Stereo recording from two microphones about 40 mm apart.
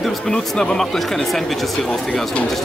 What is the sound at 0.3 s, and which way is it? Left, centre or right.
Speech, centre.